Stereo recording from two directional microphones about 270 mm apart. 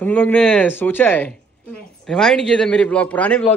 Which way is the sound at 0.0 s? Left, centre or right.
Centre.